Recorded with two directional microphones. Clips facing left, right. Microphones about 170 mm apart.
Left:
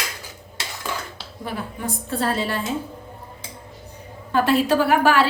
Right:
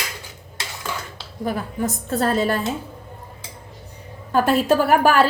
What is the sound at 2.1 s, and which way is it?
Speech, 45° right (ahead or behind).